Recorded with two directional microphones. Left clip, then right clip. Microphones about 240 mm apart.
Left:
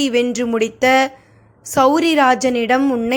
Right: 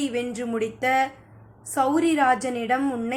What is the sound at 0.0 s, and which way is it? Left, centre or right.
A woman's voice, left.